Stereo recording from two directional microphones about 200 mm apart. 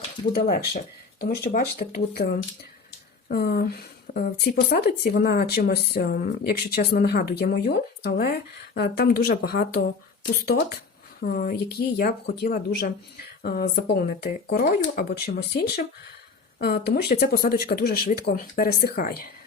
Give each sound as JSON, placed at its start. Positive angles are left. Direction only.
{"t": 0.3, "sound": "speech", "side_deg": 50}